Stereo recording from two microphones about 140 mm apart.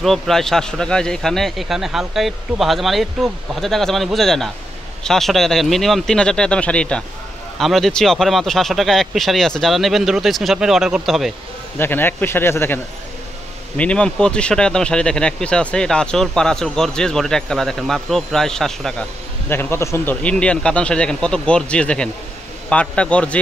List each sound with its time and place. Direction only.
0.0 s speech: centre (ahead or behind)
11.8 s speech: 15° left (ahead or behind)
19.5 s speech: 15° left (ahead or behind)
20.2 s speech: 10° left (ahead or behind)